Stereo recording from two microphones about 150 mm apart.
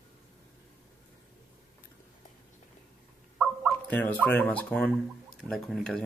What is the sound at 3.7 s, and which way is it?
Bird, 10° left (ahead or behind).